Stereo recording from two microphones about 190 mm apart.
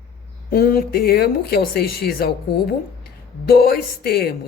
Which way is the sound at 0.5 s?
50° left (ahead or behind).